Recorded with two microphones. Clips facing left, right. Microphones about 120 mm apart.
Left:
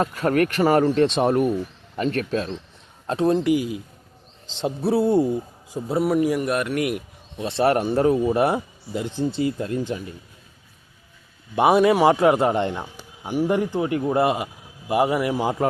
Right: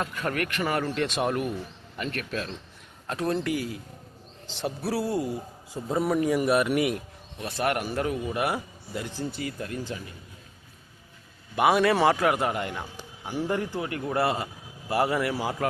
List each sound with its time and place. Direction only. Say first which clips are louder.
0.0 s a man's voice: left 9 dB; 35° left (ahead or behind)
5.7 s speech: left 4 dB; 5° left (ahead or behind)
7.3 s a man's voice: left 8 dB; 25° left (ahead or behind)
11.5 s a man's voice: left 5 dB; 25° left (ahead or behind)